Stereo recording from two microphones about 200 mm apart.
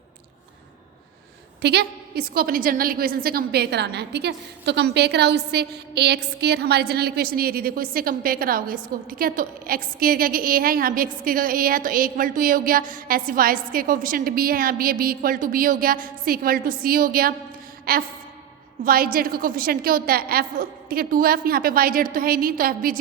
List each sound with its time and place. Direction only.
1.6 s a woman's voice: 55° right (ahead or behind)